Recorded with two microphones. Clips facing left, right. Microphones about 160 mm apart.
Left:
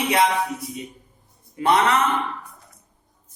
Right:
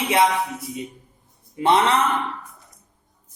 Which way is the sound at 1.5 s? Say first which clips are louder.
Right 1 dB; 25° right (ahead or behind).